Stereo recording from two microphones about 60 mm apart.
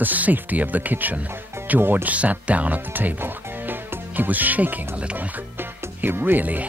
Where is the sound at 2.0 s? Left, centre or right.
Right.